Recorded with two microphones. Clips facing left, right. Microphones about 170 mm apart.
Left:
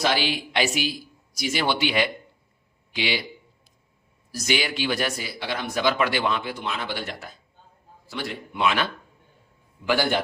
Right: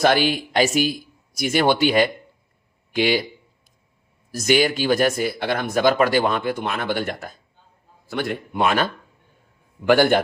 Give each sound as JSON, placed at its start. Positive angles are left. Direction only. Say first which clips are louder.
{"t": 0.0, "sound": "speech", "louder": "right 6 dB", "side_deg": -50}
{"t": 4.3, "sound": "speech", "louder": "right 8 dB", "side_deg": -50}